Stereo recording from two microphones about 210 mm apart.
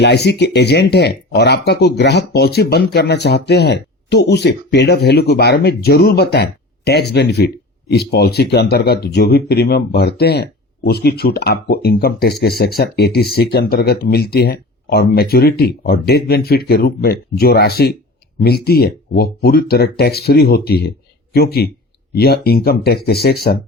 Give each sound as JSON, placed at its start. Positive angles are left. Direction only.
{"t": 0.0, "sound": "speech", "side_deg": 55}